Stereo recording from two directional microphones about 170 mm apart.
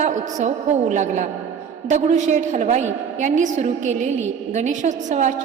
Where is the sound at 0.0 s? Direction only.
45° right (ahead or behind).